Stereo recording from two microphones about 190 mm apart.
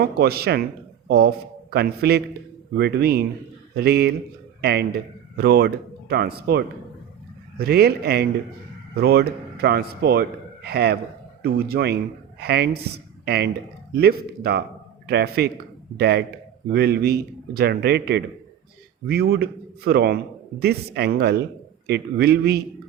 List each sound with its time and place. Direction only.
0.0 s a man's voice: 55° right (ahead or behind)
7.6 s speech: 55° right (ahead or behind)